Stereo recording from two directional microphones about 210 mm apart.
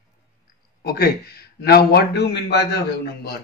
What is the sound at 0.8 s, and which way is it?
Speech, 50° left (ahead or behind).